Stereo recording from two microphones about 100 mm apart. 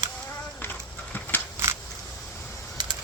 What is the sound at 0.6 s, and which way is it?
Horse, 20° left (ahead or behind).